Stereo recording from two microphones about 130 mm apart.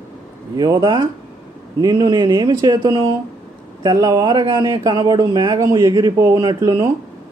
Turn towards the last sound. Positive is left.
turn(degrees=-30)  # may be behind; listen again after turning